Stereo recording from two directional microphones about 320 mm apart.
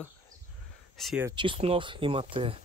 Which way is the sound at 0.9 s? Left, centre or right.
Centre.